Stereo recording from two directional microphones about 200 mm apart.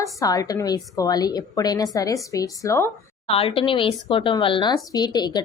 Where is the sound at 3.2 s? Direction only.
30° left (ahead or behind).